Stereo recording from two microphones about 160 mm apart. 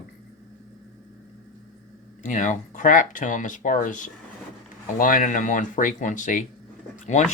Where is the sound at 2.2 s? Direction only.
50° left (ahead or behind).